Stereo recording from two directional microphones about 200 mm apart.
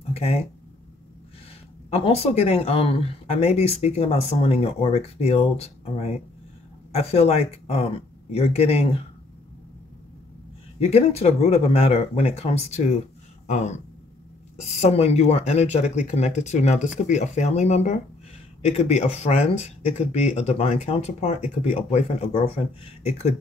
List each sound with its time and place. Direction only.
0.1 s speech: 30° left (ahead or behind)
1.9 s speech: 30° left (ahead or behind)
10.8 s speech: 30° left (ahead or behind)
14.8 s speech: 30° left (ahead or behind)